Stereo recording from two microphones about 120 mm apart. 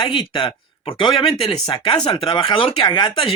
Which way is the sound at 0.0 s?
45° left (ahead or behind).